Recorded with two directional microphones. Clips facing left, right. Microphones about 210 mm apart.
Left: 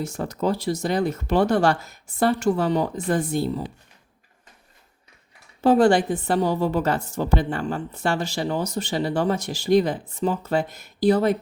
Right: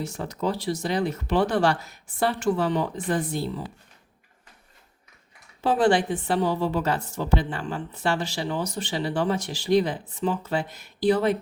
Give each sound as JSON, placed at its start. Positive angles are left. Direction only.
{"t": 0.0, "sound": "a woman's voice", "side_deg": 45}
{"t": 5.6, "sound": "a woman's voice", "side_deg": 45}